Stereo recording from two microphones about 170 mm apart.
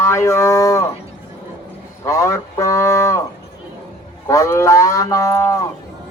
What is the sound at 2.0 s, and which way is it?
Cattle, 20° left (ahead or behind).